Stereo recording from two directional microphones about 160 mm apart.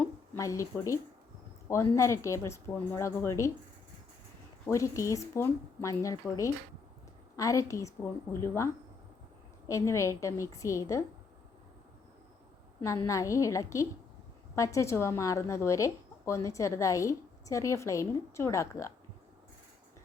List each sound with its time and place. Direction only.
0.3 s a woman's voice: 20° left (ahead or behind)
4.6 s a woman's voice: 20° left (ahead or behind)
12.8 s a woman's voice: 20° left (ahead or behind)